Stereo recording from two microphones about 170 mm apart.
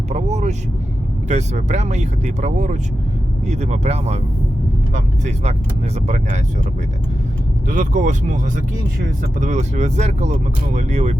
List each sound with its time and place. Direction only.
0.1 s vehicle: 40° right (ahead or behind)
1.3 s speech: 45° right (ahead or behind)
5.2 s speech: 40° right (ahead or behind)
7.7 s speech: 50° right (ahead or behind)